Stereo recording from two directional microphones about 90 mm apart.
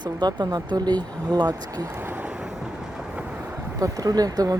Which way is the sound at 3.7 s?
40° right (ahead or behind).